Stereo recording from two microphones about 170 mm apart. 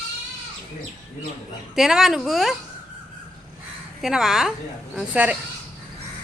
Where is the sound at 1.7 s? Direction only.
Centre (ahead or behind).